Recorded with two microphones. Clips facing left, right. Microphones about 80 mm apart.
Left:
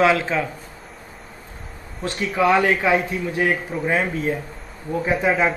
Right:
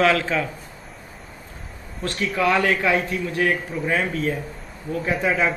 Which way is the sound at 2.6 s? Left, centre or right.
Centre.